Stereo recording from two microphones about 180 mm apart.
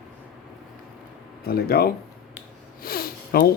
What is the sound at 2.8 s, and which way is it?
Sniff, 55° left (ahead or behind).